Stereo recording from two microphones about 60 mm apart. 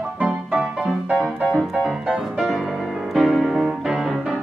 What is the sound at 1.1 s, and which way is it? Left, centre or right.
Music, centre.